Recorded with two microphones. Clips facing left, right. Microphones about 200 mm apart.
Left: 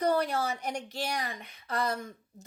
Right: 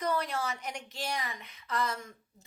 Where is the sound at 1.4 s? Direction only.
55° left (ahead or behind).